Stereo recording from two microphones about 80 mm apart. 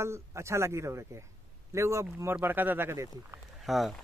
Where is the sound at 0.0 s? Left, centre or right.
Right.